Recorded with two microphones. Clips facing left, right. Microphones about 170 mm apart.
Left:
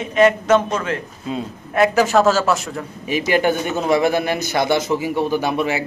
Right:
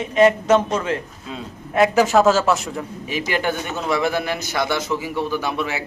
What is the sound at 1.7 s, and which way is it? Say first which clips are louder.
Speech: even; 10° right (ahead or behind).